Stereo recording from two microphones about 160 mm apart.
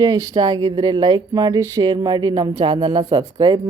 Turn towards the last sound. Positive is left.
turn(degrees=-25)  # may be behind; listen again after turning